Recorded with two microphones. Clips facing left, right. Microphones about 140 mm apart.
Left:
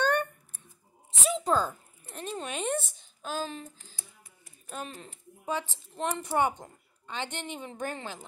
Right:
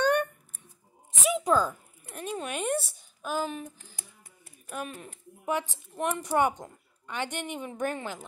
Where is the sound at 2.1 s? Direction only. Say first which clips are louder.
Right 2 dB; 10° right (ahead or behind).